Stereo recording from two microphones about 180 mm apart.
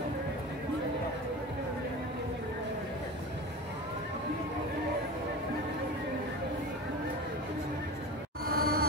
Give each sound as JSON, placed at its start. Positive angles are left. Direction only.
{"t": 8.5, "sound": "music", "side_deg": -55}